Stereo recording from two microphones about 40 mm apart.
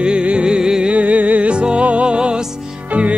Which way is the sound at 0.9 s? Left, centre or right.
Right.